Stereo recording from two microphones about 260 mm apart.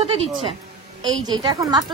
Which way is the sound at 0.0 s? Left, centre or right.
Right.